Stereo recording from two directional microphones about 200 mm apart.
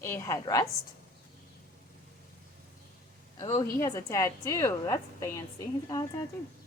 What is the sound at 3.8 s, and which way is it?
A woman's voice, 15° left (ahead or behind).